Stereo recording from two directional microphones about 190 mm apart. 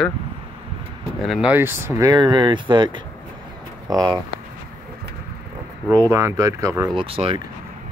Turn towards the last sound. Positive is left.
turn(degrees=-30)  # may be behind; listen again after turning